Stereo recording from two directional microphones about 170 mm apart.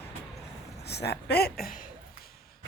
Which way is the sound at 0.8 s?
75° left (ahead or behind).